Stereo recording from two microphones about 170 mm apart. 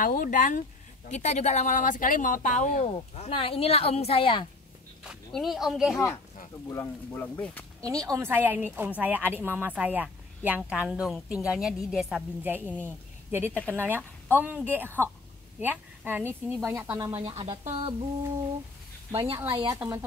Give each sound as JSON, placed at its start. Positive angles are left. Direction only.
{"t": 0.0, "sound": "speech", "side_deg": 55}
{"t": 5.0, "sound": "speech", "side_deg": 0}
{"t": 6.7, "sound": "speech", "side_deg": 15}
{"t": 7.8, "sound": "a woman's voice", "side_deg": -20}
{"t": 17.3, "sound": "speech", "side_deg": -30}
{"t": 19.3, "sound": "a woman's voice", "side_deg": -15}